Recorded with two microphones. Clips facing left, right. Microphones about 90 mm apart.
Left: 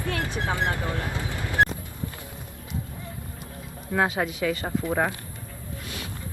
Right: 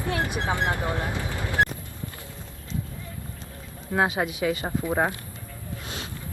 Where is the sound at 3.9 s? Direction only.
15° right (ahead or behind).